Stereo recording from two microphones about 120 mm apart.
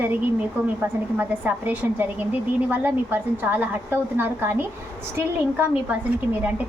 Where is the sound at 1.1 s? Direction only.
15° right (ahead or behind).